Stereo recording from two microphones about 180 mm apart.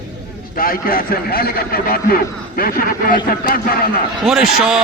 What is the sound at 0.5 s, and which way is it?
Speech, 55° left (ahead or behind).